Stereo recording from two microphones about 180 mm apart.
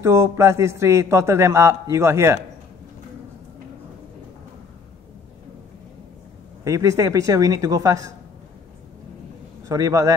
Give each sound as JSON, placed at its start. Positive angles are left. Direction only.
{"t": 0.0, "sound": "a man's voice", "side_deg": -15}
{"t": 6.6, "sound": "a man's voice", "side_deg": -15}
{"t": 9.7, "sound": "a man's voice", "side_deg": -20}